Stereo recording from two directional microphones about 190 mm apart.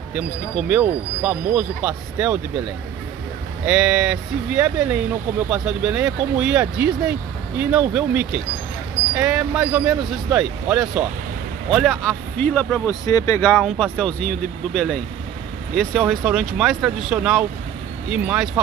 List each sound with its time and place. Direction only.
0.1 s speech: 5° right (ahead or behind)
3.6 s speech: 5° right (ahead or behind)
12.0 s speech: 5° left (ahead or behind)